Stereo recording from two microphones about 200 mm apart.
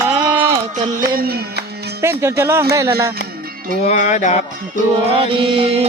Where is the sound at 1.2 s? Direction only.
50° right (ahead or behind).